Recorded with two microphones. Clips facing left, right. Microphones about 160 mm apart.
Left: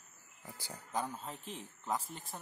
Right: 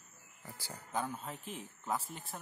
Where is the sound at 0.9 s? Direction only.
Centre (ahead or behind).